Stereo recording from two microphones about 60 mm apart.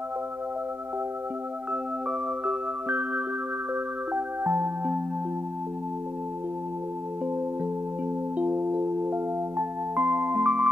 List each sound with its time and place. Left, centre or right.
1.7 s music: right
8.4 s music: right